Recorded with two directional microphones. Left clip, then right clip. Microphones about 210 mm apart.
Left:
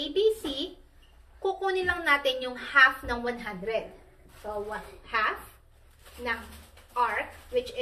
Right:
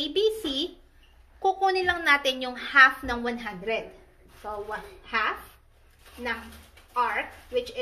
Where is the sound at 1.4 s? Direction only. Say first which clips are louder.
Right 4 dB; 45° right (ahead or behind).